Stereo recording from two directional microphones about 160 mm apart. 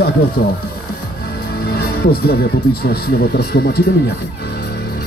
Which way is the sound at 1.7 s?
80° left.